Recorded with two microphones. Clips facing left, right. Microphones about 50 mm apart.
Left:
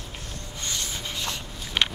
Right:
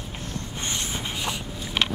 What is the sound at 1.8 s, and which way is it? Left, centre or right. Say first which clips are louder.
Vehicle: even; centre.